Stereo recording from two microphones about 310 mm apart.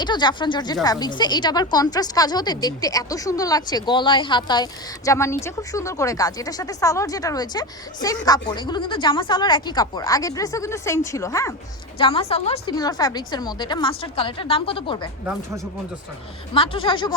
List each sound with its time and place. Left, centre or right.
0.0 s speech: centre
16.6 s speech: centre